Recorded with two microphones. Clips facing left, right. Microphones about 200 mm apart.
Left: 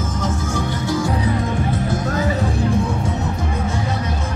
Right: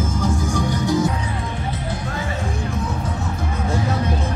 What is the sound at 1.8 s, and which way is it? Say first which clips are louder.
Music: left 6 dB; 40° left (ahead or behind).